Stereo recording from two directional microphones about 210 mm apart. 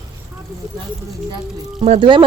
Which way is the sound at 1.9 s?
25° right (ahead or behind).